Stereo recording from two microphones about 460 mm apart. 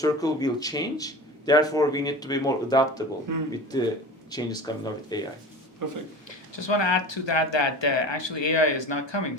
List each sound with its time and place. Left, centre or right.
0.0 s speech: centre
3.3 s speech: right
3.7 s speech: centre
5.8 s speech: right
6.5 s speech: left